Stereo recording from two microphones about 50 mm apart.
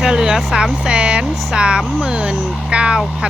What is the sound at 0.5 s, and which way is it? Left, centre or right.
Speech, centre.